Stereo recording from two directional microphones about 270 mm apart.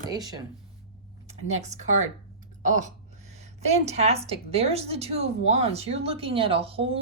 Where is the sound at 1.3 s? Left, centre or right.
Right.